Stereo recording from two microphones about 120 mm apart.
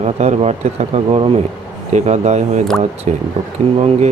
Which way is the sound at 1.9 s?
70° right (ahead or behind).